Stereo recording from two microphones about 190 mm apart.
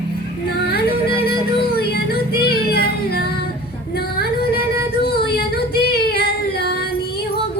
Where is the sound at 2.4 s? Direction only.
55° left (ahead or behind).